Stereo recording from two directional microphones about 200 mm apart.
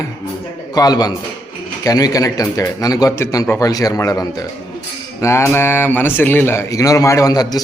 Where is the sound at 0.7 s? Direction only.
20° left (ahead or behind).